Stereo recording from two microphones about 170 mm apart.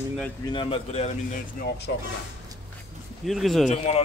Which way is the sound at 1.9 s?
90° left.